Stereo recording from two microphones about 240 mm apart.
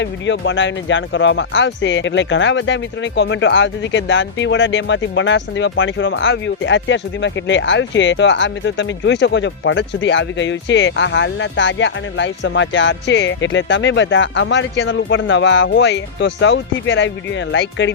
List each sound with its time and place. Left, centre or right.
0.0 s speech: left